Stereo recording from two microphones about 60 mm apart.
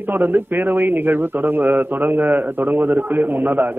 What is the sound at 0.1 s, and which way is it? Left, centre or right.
A man's voice, right.